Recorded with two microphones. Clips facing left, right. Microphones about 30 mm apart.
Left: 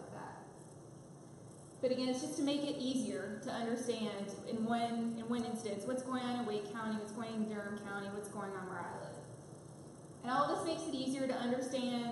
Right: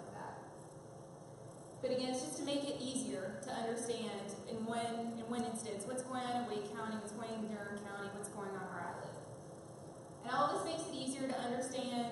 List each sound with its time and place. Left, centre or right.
1.8 s a woman's voice: centre
10.2 s a woman's voice: centre